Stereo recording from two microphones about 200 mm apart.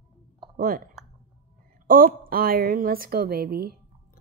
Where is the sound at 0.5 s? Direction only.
45° right (ahead or behind).